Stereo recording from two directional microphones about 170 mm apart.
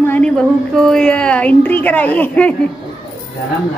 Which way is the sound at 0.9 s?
5° left (ahead or behind).